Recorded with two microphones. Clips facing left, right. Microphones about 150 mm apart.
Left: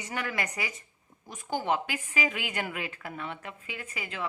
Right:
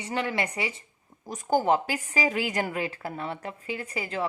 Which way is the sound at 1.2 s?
40° right (ahead or behind).